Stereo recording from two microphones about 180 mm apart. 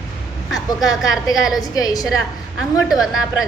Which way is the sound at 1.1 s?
Centre (ahead or behind).